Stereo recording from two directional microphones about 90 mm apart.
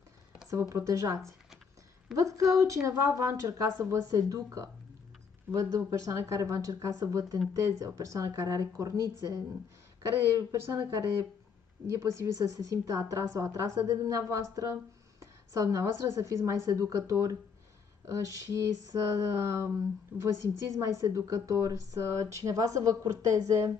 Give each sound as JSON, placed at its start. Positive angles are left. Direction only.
{"t": 0.5, "sound": "a woman's voice", "side_deg": -35}
{"t": 10.3, "sound": "a woman's voice", "side_deg": -35}
{"t": 12.0, "sound": "a woman's voice", "side_deg": -40}
{"t": 20.1, "sound": "a woman's voice", "side_deg": -20}
{"t": 20.6, "sound": "a woman's voice", "side_deg": -35}